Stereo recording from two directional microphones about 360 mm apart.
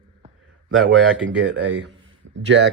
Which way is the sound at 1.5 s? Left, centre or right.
Right.